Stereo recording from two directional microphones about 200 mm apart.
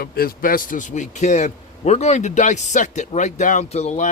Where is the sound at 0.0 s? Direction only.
50° left (ahead or behind).